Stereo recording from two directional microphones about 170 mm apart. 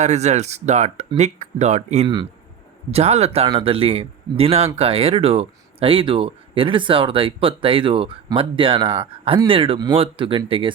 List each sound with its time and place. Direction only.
0.0 s speech: 40° right (ahead or behind)